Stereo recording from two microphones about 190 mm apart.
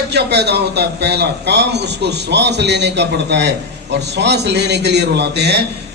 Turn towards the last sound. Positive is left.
turn(degrees=-60)  # may be behind; listen again after turning